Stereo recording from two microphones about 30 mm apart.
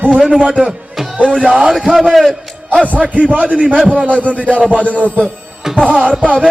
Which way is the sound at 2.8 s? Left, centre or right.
Right.